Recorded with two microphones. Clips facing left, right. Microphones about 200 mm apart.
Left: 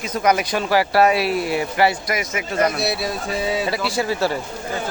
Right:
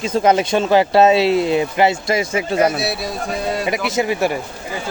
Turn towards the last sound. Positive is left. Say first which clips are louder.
# right 3 dB
turn(degrees=-15)  # may be behind; listen again after turning